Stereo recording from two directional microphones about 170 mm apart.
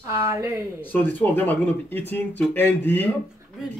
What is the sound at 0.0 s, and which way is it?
Speech, 15° right (ahead or behind).